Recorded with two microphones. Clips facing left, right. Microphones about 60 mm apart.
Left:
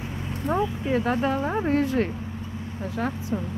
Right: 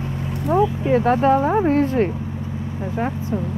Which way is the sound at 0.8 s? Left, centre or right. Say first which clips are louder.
Right 7 dB; right.